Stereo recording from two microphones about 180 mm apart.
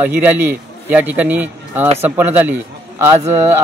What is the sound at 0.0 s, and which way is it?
A man's voice, 10° right (ahead or behind).